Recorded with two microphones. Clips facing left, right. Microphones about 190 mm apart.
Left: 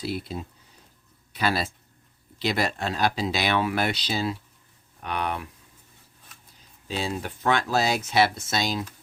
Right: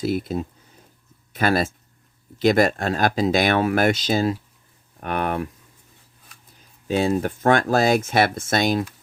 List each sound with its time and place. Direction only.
0.0 s speech: 50° right (ahead or behind)
6.8 s speech: 50° right (ahead or behind)